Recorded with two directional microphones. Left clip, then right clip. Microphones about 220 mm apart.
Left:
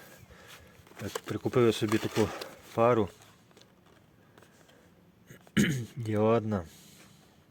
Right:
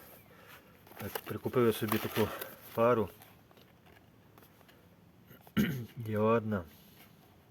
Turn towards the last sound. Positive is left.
turn(degrees=30)  # may be behind; listen again after turning